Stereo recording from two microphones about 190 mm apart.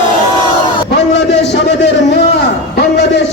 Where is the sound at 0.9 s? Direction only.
65° left (ahead or behind).